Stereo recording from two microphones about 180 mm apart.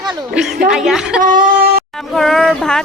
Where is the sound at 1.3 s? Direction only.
55° right (ahead or behind).